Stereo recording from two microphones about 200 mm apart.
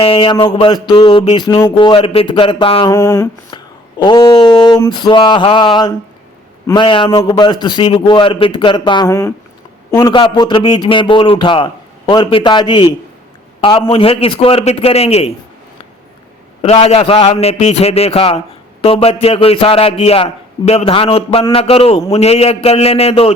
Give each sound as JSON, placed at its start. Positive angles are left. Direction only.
{"t": 0.0, "sound": "a man's voice", "side_deg": 25}
{"t": 2.9, "sound": "a sound", "side_deg": 15}
{"t": 4.0, "sound": "a man's voice", "side_deg": 20}
{"t": 16.6, "sound": "a man's voice", "side_deg": 30}